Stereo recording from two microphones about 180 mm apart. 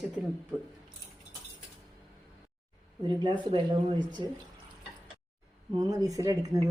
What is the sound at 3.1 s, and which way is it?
Speech, 25° right (ahead or behind).